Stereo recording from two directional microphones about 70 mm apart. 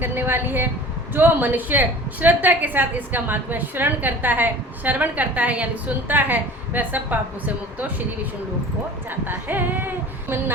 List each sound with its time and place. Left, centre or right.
0.0 s a woman's voice: right
9.0 s a woman's voice: right